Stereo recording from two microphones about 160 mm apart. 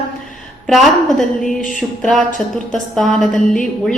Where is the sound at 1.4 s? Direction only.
55° left (ahead or behind).